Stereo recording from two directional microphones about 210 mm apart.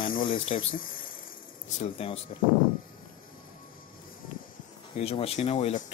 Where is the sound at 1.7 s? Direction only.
25° left (ahead or behind).